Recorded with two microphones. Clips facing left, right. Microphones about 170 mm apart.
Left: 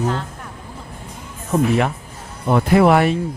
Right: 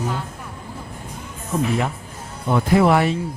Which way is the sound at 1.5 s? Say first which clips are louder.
Left 4 dB; 65° left (ahead or behind).